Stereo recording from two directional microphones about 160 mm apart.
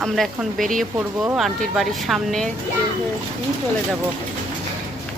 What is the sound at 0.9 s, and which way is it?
Speech, 15° right (ahead or behind).